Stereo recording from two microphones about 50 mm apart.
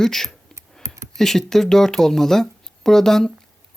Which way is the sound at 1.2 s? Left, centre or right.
Centre.